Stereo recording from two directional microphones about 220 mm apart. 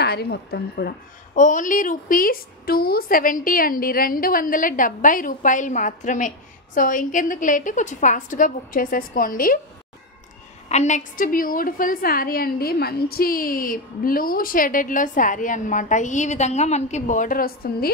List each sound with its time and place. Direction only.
0.0 s a woman's voice: 45° left (ahead or behind)
10.7 s a woman's voice: 30° left (ahead or behind)